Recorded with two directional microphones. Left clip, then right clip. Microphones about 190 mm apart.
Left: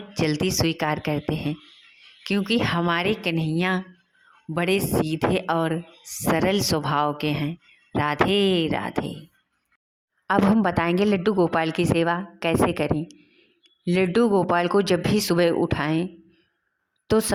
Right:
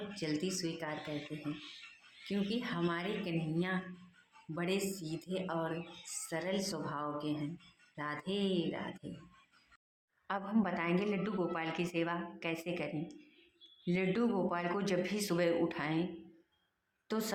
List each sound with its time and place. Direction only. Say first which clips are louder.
0.1 s speech: left 16 dB; 45° left (ahead or behind)
2.2 s speech: left 15 dB; 45° left (ahead or behind)
10.2 s a woman's voice: left 15 dB; 45° left (ahead or behind)
17.1 s a woman's voice: left 16 dB; 40° left (ahead or behind)